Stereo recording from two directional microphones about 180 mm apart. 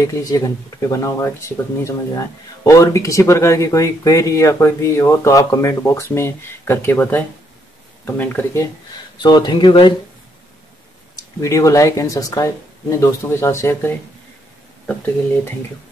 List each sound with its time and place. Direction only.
0.0 s speech: 20° left (ahead or behind)
9.2 s speech: 25° left (ahead or behind)
11.4 s speech: 15° left (ahead or behind)